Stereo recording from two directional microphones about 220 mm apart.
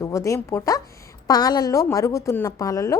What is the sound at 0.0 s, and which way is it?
A woman's voice, 15° left (ahead or behind).